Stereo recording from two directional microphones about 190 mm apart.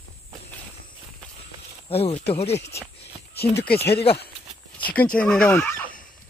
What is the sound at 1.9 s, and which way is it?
Speech, 30° left (ahead or behind).